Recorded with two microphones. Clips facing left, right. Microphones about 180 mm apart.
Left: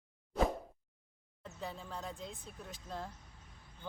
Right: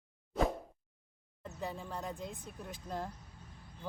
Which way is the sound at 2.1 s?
60° right (ahead or behind).